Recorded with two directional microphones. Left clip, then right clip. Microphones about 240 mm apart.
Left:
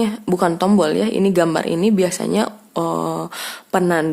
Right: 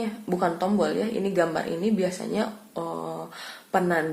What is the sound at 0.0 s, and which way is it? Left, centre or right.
Speech, left.